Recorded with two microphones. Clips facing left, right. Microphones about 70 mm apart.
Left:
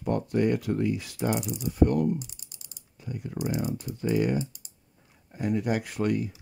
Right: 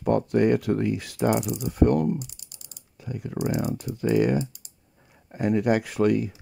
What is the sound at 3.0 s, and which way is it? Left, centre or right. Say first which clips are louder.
Speech: right 3 dB; right.